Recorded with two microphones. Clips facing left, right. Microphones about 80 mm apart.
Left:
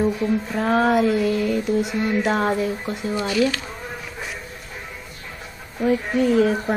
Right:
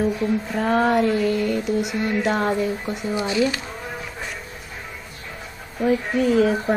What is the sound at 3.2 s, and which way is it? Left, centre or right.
Speech, centre.